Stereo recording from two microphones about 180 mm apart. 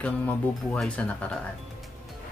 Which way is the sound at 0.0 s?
10° left (ahead or behind).